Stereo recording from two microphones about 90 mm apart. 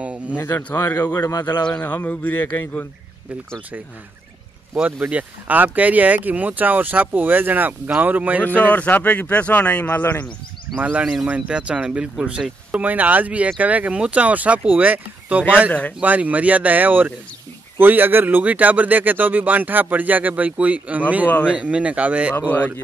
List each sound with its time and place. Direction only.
0.0 s a sound: 15° right (ahead or behind)
0.4 s speech: 20° left (ahead or behind)
1.2 s speech: 45° left (ahead or behind)
1.7 s speech: 15° left (ahead or behind)
4.8 s speech: 20° right (ahead or behind)
8.5 s speech: 15° left (ahead or behind)
10.8 s speech: 15° right (ahead or behind)